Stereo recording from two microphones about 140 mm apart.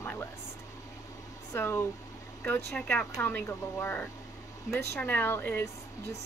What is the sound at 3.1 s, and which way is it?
A woman's voice, 20° left (ahead or behind).